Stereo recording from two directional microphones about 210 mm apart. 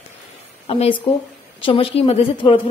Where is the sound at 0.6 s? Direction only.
30° left (ahead or behind).